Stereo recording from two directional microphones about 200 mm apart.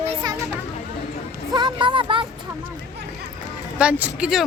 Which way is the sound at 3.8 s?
5° right (ahead or behind).